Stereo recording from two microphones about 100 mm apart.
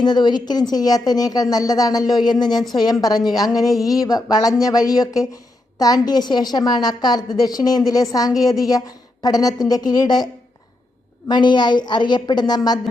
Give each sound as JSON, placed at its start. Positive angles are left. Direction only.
{"t": 0.0, "sound": "a woman's voice", "side_deg": 45}
{"t": 11.3, "sound": "a woman's voice", "side_deg": 50}